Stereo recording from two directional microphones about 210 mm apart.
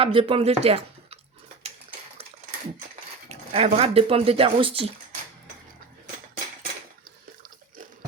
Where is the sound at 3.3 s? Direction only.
30° right (ahead or behind).